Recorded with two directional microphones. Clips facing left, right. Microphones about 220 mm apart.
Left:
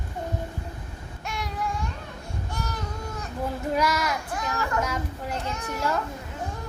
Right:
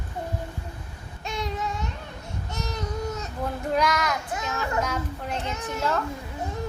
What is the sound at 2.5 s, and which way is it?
Baby cry, 20° right (ahead or behind).